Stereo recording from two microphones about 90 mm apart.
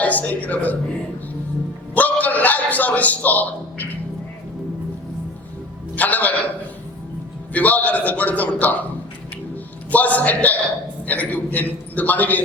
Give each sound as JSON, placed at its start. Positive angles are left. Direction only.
{"t": 0.0, "sound": "a man's voice", "side_deg": 15}
{"t": 2.0, "sound": "a sound", "side_deg": 20}
{"t": 6.0, "sound": "a man's voice", "side_deg": 20}
{"t": 7.5, "sound": "a man's voice", "side_deg": 15}
{"t": 9.9, "sound": "a man's voice", "side_deg": 20}